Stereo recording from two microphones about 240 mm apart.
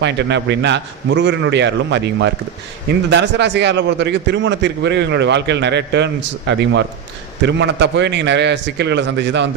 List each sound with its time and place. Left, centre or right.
0.0 s a man's voice: right